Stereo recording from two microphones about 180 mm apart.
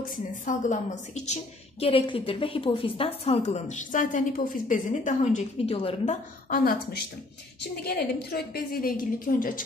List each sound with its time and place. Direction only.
0.0 s a woman's voice: 45° left (ahead or behind)
6.5 s a woman's voice: 55° left (ahead or behind)